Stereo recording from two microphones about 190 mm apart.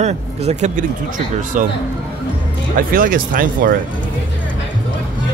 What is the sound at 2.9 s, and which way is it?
Speech, 45° right (ahead or behind).